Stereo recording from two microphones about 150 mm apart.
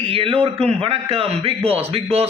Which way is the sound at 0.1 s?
40° right (ahead or behind).